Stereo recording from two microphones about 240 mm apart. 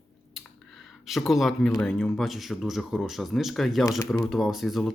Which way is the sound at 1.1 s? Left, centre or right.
Centre.